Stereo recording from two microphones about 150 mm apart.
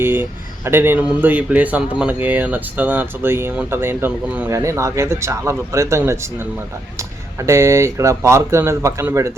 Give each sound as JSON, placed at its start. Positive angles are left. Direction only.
{"t": 0.0, "sound": "speech", "side_deg": -15}
{"t": 7.4, "sound": "speech", "side_deg": -20}